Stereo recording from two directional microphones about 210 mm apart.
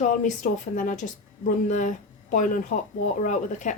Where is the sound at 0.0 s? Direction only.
35° left (ahead or behind).